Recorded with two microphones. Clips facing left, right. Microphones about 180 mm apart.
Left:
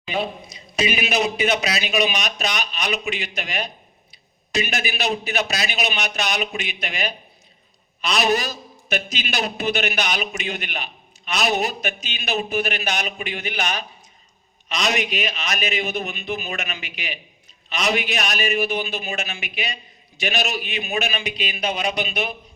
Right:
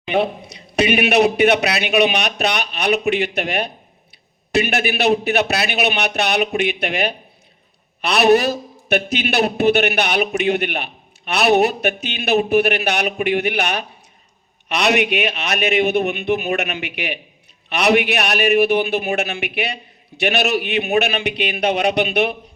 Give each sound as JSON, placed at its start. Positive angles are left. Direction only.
{"t": 0.0, "sound": "a man's voice", "side_deg": -65}